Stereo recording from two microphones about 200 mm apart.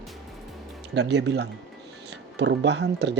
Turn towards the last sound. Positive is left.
turn(degrees=-60)  # may be behind; listen again after turning